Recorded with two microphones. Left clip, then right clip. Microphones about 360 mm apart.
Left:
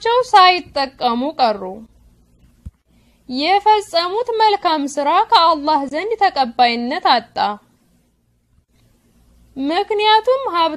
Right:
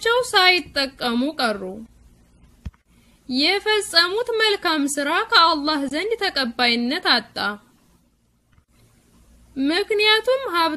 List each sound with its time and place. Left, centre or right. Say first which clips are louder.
0.0 s a woman's voice: left 6 dB; centre
3.3 s a woman's voice: left 6 dB; centre
9.7 s a woman's voice: left 4 dB; centre